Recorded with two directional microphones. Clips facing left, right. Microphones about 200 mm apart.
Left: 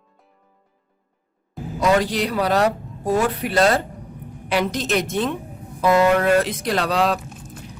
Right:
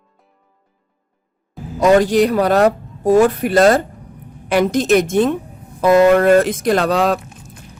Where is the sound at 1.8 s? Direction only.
45° right (ahead or behind).